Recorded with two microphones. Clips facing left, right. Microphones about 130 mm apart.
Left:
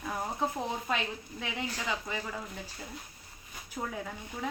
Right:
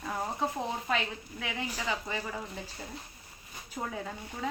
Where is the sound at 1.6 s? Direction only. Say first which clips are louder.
Right 1 dB; 10° right (ahead or behind).